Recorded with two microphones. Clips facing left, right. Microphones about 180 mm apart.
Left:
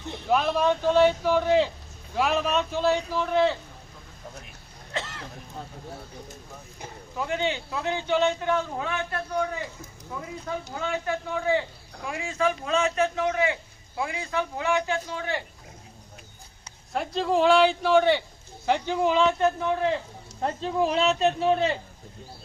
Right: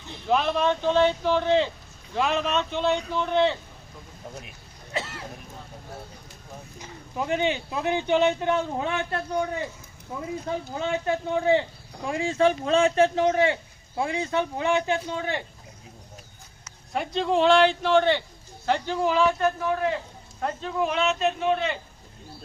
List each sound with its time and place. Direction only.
0.3 s speech: 5° left (ahead or behind)
4.9 s speech: 10° right (ahead or behind)
7.2 s speech: 20° right (ahead or behind)
10.4 s speech: 25° right (ahead or behind)
16.9 s a man's voice: centre (ahead or behind); by 21.8 s 35° left (ahead or behind)